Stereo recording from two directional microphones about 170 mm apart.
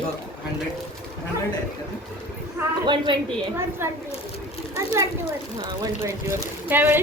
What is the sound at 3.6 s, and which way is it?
Speech, 15° right (ahead or behind).